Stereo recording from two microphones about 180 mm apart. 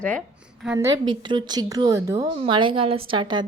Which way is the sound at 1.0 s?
25° right (ahead or behind).